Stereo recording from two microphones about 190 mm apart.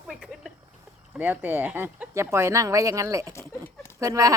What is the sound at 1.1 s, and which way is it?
Speech, 10° right (ahead or behind).